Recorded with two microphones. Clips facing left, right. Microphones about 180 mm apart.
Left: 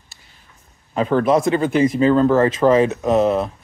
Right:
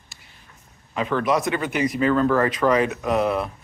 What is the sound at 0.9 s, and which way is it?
Speech, 35° left (ahead or behind).